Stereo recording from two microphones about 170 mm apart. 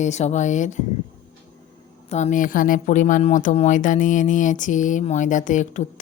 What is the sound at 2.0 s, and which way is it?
Speech, 40° left (ahead or behind).